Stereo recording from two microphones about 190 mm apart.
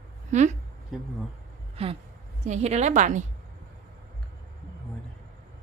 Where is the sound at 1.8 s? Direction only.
30° right (ahead or behind).